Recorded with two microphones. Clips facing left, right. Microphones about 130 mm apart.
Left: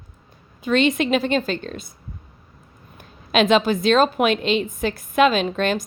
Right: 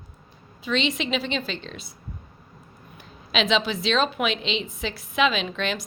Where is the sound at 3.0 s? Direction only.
50° left (ahead or behind).